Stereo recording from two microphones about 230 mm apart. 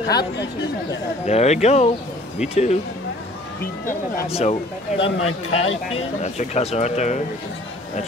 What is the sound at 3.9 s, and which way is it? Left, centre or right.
Speech, left.